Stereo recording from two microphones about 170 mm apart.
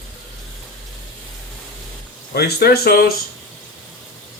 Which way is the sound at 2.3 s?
70° left (ahead or behind).